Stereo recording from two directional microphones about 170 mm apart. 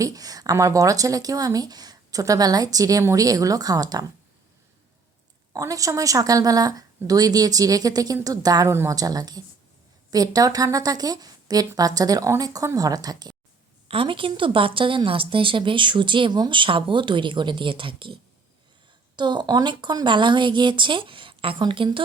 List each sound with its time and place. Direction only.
0.0 s a woman's voice: 20° right (ahead or behind)
5.5 s a woman's voice: 20° right (ahead or behind)
13.8 s a woman's voice: 35° right (ahead or behind)